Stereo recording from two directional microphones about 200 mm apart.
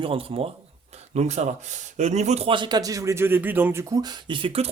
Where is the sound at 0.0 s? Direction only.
25° right (ahead or behind).